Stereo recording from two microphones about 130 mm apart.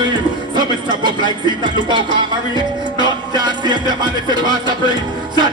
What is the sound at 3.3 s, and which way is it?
Speech, 35° right (ahead or behind).